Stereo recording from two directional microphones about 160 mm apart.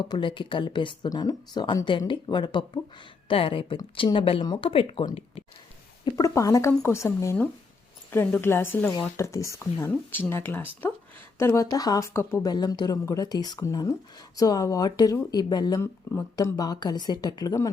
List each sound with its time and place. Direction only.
0.0 s speech: 30° left (ahead or behind)
6.1 s speech: 20° left (ahead or behind)